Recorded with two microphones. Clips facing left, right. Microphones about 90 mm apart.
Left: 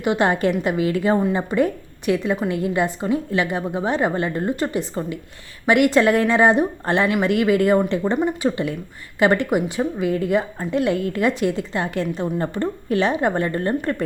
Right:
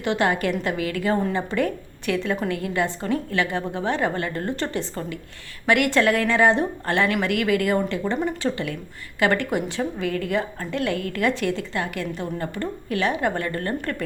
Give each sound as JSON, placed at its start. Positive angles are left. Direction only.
{"t": 0.0, "sound": "a woman's voice", "side_deg": 20}